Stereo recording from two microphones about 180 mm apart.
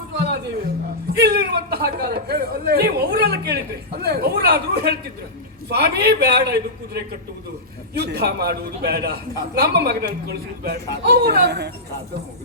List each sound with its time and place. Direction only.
1.1 s a man's voice: 60° right (ahead or behind)
7.9 s a man's voice: 65° right (ahead or behind)